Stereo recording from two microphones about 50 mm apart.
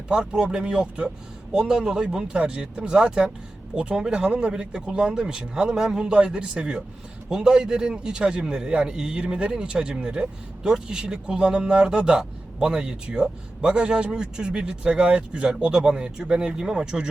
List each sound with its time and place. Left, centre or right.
0.1 s a man's voice: centre